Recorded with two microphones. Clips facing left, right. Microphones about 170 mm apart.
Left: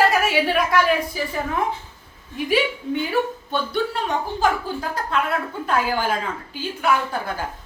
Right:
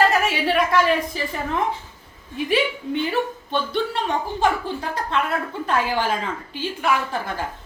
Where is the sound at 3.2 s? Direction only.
5° left (ahead or behind).